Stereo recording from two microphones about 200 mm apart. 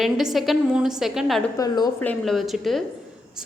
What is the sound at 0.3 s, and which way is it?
A woman's voice, centre (ahead or behind).